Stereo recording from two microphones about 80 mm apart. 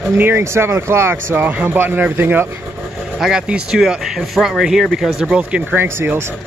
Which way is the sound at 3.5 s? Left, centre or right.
Centre.